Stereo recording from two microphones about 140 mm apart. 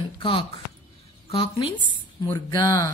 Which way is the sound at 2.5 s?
25° left (ahead or behind).